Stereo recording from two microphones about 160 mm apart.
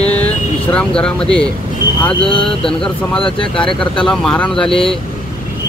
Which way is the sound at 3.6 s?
5° left (ahead or behind).